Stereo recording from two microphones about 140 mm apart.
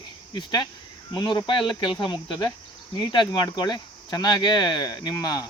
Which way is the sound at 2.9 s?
30° left (ahead or behind).